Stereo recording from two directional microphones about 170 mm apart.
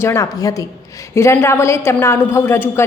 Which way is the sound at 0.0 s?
15° left (ahead or behind).